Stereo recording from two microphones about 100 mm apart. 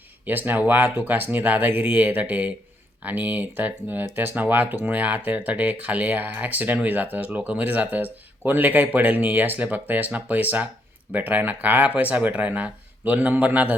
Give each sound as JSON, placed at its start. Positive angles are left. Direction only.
{"t": 0.3, "sound": "speech", "side_deg": -20}